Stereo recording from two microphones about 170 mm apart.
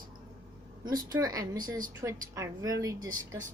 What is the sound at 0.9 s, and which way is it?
A woman's voice, 20° right (ahead or behind).